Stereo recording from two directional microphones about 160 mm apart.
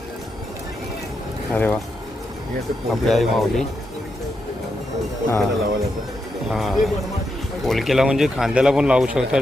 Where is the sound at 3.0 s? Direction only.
Centre (ahead or behind).